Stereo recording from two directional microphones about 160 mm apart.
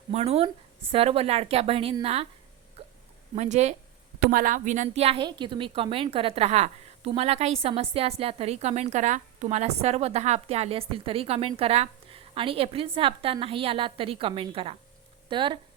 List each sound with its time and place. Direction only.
0.1 s a woman's voice: 40° right (ahead or behind)
2.8 s hiccup: 40° right (ahead or behind)
3.3 s speech: 45° right (ahead or behind)
4.2 s a woman's voice: 60° right (ahead or behind); by 15.5 s 30° right (ahead or behind)